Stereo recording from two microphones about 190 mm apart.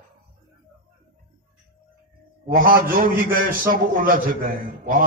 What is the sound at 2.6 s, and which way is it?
A man's voice, 50° right (ahead or behind).